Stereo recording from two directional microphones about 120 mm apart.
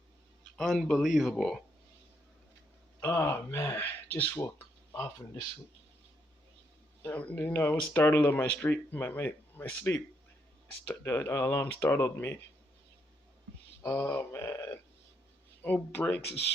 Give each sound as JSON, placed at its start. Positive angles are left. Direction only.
{"t": 0.5, "sound": "speech", "side_deg": 0}
{"t": 3.0, "sound": "speech", "side_deg": 20}
{"t": 4.5, "sound": "a sound", "side_deg": 20}
{"t": 7.0, "sound": "speech", "side_deg": 15}
{"t": 13.8, "sound": "speech", "side_deg": 20}